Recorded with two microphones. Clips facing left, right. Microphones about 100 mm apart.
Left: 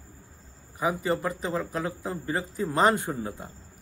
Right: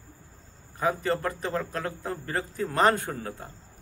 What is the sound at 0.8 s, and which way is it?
A man's voice, 15° left (ahead or behind).